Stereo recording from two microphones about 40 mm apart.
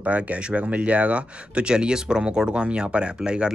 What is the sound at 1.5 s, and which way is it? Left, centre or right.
Speech, right.